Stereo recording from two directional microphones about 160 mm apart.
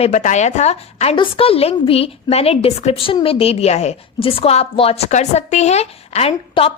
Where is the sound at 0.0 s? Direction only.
45° left (ahead or behind).